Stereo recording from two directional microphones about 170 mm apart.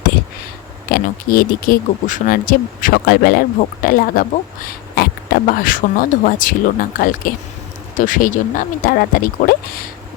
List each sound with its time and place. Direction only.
0.9 s speech: 60° left (ahead or behind)